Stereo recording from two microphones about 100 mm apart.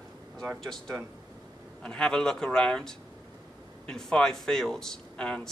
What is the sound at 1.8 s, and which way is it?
A man's voice, 10° left (ahead or behind).